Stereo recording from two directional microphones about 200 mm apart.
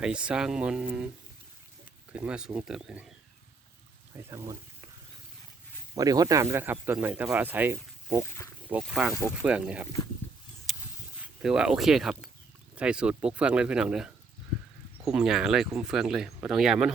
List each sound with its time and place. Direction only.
0.0 s speech: 5° right (ahead or behind)
2.1 s speech: 5° right (ahead or behind)
4.2 s speech: 15° right (ahead or behind)
6.0 s speech: 20° right (ahead or behind)
11.2 s speech: 5° right (ahead or behind)